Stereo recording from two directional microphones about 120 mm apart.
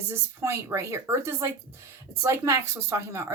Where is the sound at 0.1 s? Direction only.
25° right (ahead or behind).